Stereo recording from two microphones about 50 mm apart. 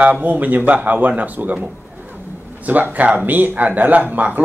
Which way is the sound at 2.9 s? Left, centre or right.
Right.